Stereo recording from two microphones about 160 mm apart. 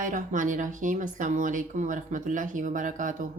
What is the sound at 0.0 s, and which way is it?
Speech, 50° right (ahead or behind).